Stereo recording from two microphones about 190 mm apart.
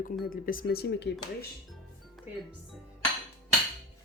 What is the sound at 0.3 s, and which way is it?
Speech, 50° left (ahead or behind).